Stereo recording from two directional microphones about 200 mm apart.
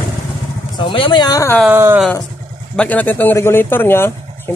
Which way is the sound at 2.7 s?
10° left (ahead or behind).